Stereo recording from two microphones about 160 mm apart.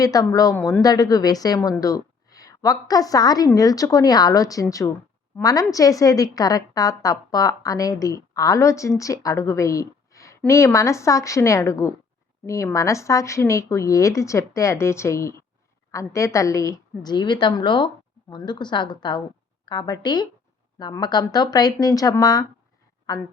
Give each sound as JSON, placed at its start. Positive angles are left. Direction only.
{"t": 0.0, "sound": "a woman's voice", "side_deg": 20}